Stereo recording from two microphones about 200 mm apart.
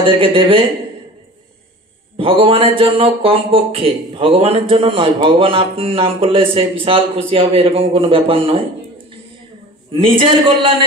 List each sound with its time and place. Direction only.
0.0 s speech: 25° right (ahead or behind)
2.1 s speech: 25° right (ahead or behind)
9.9 s speech: 25° right (ahead or behind)